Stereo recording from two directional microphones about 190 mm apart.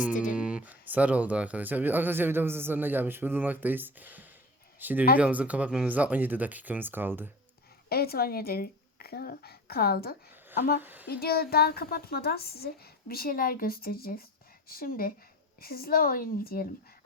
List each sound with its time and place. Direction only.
0.0 s a sound: 40° left (ahead or behind)
0.3 s speech: 5° right (ahead or behind)
7.9 s speech: 55° left (ahead or behind)
10.8 s speech: 10° right (ahead or behind)
11.1 s a woman's voice: 55° left (ahead or behind)